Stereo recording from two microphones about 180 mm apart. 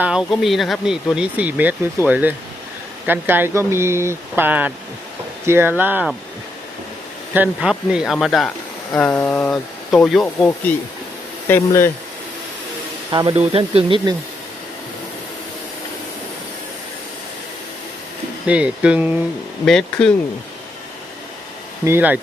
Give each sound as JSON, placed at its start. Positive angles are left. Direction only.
{"t": 0.0, "sound": "speech", "side_deg": -5}
{"t": 7.3, "sound": "speech", "side_deg": -5}
{"t": 13.1, "sound": "speech", "side_deg": -25}
{"t": 13.3, "sound": "speech", "side_deg": -35}
{"t": 18.4, "sound": "speech", "side_deg": -5}
{"t": 19.6, "sound": "speech", "side_deg": 5}
{"t": 21.8, "sound": "speech", "side_deg": -10}